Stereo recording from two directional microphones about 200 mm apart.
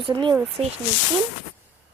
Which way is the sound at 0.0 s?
25° right (ahead or behind).